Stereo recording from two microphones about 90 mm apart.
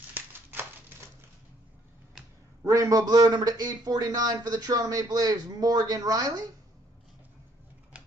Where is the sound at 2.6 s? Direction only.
35° right (ahead or behind).